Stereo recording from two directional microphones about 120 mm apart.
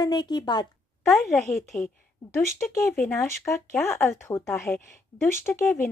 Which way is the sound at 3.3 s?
20° left (ahead or behind).